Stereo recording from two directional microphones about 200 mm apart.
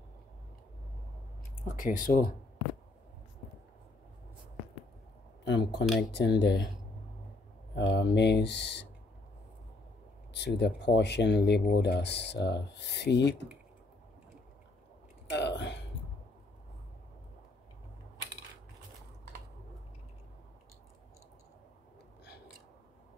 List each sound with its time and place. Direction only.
1.8 s speech: 45° left (ahead or behind)
5.4 s speech: 60° left (ahead or behind)
7.7 s speech: 60° left (ahead or behind)
10.3 s speech: 60° left (ahead or behind)
15.3 s a sound: 60° left (ahead or behind)